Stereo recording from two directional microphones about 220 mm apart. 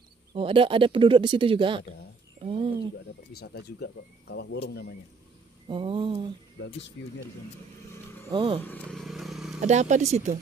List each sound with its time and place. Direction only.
0.3 s speech: 25° right (ahead or behind)
2.4 s a sound: 25° right (ahead or behind)
3.3 s speech: 45° left (ahead or behind)
5.7 s speech: 25° right (ahead or behind)
7.0 s speech: 60° left (ahead or behind)
8.3 s speech: 20° right (ahead or behind)
8.6 s a sound: 5° left (ahead or behind)
9.6 s speech: 30° right (ahead or behind)